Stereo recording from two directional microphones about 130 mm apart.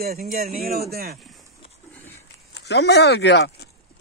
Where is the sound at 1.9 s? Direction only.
15° left (ahead or behind).